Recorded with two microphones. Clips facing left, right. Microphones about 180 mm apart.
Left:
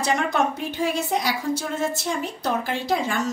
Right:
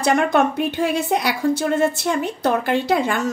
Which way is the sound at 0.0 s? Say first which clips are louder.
Right 5 dB; 60° right (ahead or behind).